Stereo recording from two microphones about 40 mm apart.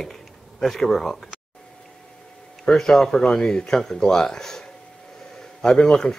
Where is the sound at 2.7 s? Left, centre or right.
Centre.